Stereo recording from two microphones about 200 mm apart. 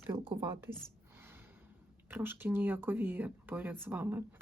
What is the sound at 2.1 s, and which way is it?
Whispering, 10° right (ahead or behind).